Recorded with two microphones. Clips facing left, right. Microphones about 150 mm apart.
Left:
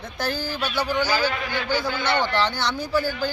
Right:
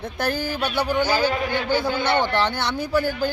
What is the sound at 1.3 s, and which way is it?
A man's voice, 40° right (ahead or behind).